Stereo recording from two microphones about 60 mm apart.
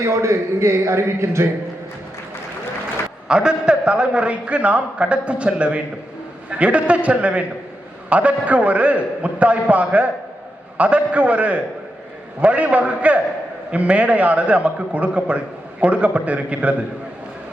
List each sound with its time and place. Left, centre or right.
0.0 s a man's voice: right
3.2 s a man's voice: centre